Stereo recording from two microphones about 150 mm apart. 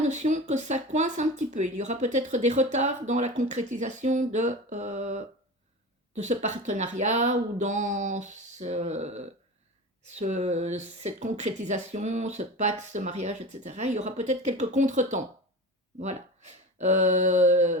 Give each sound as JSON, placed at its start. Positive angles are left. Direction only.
{"t": 0.0, "sound": "speech", "side_deg": -50}